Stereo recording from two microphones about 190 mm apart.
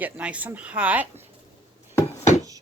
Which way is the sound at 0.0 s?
5° right (ahead or behind).